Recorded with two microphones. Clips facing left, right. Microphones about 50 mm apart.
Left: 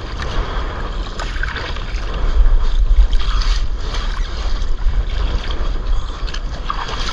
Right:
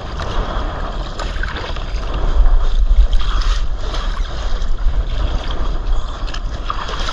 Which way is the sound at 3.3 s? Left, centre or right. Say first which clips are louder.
Right 1 dB; right.